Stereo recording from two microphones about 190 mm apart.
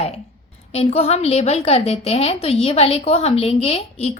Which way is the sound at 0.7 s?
35° left (ahead or behind).